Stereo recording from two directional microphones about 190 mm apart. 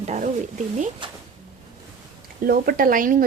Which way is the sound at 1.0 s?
25° right (ahead or behind).